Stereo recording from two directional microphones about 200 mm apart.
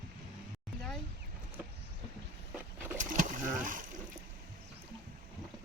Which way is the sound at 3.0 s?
40° right (ahead or behind).